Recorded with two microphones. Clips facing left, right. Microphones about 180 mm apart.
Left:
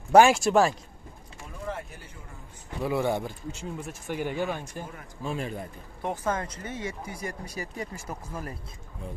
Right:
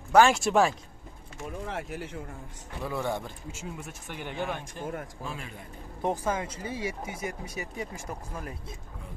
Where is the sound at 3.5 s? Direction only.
Centre (ahead or behind).